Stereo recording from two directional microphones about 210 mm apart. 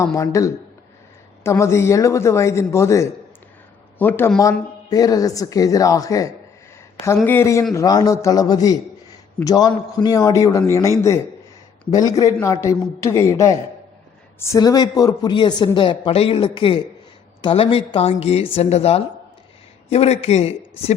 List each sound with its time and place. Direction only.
0.0 s a man's voice: 15° left (ahead or behind); by 20.5 s 30° left (ahead or behind)